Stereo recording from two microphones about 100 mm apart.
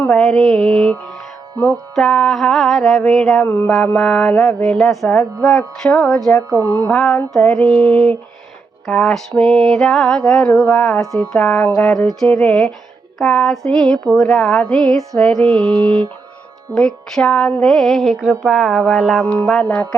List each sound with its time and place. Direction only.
0.1 s music: 5° left (ahead or behind)
0.8 s mantra: 5° left (ahead or behind)
2.0 s music: 5° left (ahead or behind)
3.4 s mantra: 20° left (ahead or behind)
3.9 s music: 5° left (ahead or behind)
6.5 s a sound: 40° right (ahead or behind)
6.8 s speech: 10° left (ahead or behind)
7.3 s music: centre (ahead or behind)
10.2 s speech: 10° left (ahead or behind)
11.8 s music: 5° left (ahead or behind)